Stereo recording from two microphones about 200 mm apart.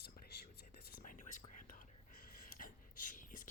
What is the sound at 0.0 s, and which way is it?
Whispering, 50° left (ahead or behind).